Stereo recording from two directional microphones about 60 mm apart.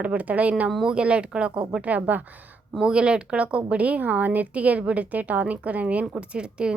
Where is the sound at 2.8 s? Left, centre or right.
Centre.